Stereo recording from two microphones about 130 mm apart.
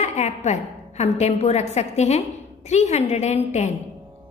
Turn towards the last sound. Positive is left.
turn(degrees=60)  # may be behind; listen again after turning